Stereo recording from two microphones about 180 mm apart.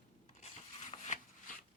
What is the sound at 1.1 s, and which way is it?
Shuffling cards, 45° left (ahead or behind).